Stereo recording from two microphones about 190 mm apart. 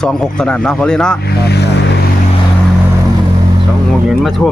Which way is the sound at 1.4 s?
60° left (ahead or behind).